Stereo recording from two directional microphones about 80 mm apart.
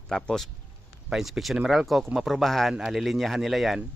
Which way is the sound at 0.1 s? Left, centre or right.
Centre.